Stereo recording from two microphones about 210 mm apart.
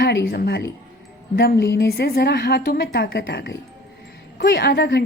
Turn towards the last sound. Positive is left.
turn(degrees=50)  # may be behind; listen again after turning